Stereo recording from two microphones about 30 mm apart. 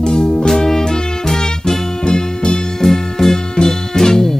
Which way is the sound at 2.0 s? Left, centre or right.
Left.